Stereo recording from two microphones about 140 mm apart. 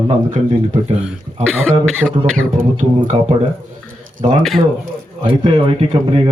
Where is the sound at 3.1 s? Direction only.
40° right (ahead or behind).